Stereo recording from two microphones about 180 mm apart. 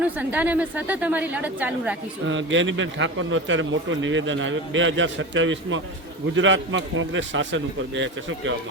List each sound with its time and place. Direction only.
0.0 s a woman's voice: 10° right (ahead or behind)
2.2 s a man's voice: 90° right